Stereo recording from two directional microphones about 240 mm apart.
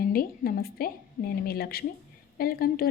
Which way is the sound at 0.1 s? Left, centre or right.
Left.